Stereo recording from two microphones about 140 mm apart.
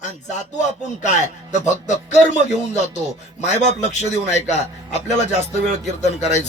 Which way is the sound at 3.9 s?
55° left (ahead or behind).